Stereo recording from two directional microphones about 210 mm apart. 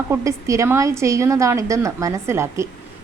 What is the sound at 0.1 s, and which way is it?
A woman's voice, 15° right (ahead or behind).